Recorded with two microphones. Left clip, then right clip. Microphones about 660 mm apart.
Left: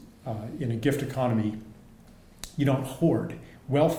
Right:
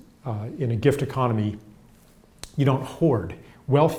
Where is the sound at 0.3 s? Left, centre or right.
Right.